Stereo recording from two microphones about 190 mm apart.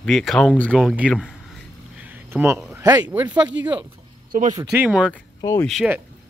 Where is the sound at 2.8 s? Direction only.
20° right (ahead or behind).